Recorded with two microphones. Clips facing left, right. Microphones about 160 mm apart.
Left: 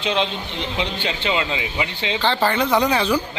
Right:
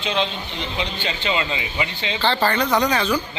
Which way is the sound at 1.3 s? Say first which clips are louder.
Left 1 dB; 10° left (ahead or behind).